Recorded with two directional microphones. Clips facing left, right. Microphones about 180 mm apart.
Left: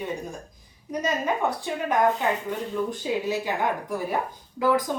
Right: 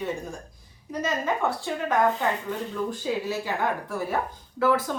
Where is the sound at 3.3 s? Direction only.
20° left (ahead or behind).